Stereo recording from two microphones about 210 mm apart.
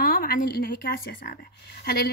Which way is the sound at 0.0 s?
45° left (ahead or behind).